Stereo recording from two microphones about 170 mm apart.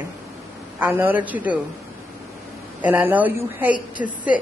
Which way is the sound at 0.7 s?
10° right (ahead or behind).